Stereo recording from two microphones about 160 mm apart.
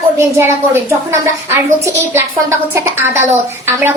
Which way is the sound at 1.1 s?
15° right (ahead or behind).